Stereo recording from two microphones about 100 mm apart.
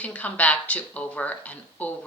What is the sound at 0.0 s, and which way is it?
Speech, 15° left (ahead or behind).